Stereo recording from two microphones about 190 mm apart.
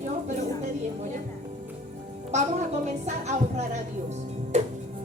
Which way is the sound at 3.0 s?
35° right (ahead or behind).